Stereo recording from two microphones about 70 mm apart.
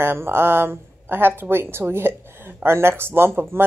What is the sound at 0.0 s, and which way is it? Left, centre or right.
Speech, right.